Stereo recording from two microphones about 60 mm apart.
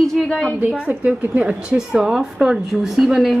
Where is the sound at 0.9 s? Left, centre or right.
Right.